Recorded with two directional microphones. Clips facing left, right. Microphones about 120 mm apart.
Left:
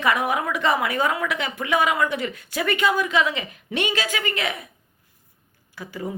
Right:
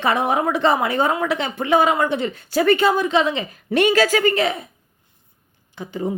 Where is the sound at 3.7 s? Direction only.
45° right (ahead or behind).